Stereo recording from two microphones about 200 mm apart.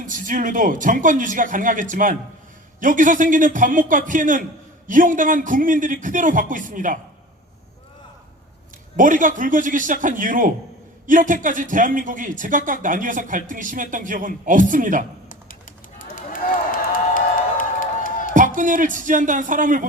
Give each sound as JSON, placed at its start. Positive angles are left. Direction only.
{"t": 0.0, "sound": "speech", "side_deg": -40}
{"t": 9.0, "sound": "speech", "side_deg": -40}
{"t": 16.0, "sound": "a sound", "side_deg": 45}
{"t": 18.3, "sound": "speech", "side_deg": -40}